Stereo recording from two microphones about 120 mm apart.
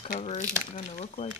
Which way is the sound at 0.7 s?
90° left.